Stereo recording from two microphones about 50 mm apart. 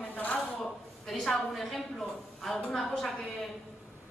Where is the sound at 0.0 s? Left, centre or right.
Left.